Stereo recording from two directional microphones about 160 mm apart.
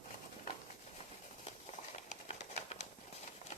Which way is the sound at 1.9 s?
45° left (ahead or behind).